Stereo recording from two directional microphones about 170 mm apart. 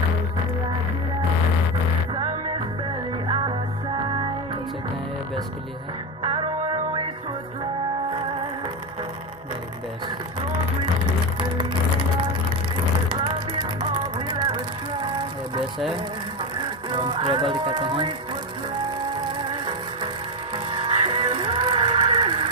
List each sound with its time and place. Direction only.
6.2 s music: 35° right (ahead or behind)
13.2 s music: 25° right (ahead or behind)
16.9 s speech: 30° right (ahead or behind)
20.5 s music: 30° right (ahead or behind)